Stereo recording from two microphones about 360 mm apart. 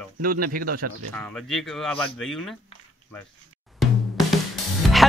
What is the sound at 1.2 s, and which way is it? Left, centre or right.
Speech, centre.